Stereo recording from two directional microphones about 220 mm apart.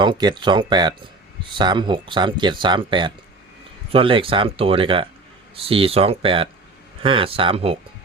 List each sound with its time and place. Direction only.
0.0 s speech: 20° right (ahead or behind)